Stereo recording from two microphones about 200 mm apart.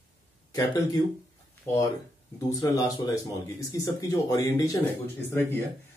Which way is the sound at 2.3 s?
15° left (ahead or behind).